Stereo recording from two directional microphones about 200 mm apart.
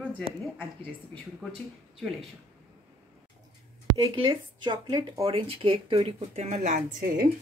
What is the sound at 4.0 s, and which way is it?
Speech, 20° right (ahead or behind).